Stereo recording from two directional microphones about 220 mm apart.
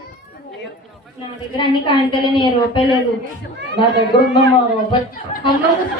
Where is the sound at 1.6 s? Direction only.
25° left (ahead or behind).